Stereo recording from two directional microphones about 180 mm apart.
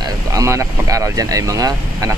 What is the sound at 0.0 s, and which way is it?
Speech, 20° right (ahead or behind).